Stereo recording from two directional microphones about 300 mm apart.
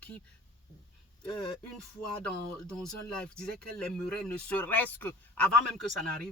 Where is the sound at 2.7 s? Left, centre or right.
Centre.